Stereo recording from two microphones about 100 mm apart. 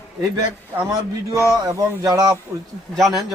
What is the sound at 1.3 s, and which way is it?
Speech, 35° right (ahead or behind).